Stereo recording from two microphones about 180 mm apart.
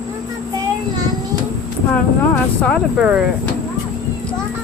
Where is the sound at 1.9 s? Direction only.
10° left (ahead or behind).